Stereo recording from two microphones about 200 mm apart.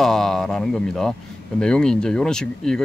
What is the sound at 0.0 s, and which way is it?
Speech, centre (ahead or behind).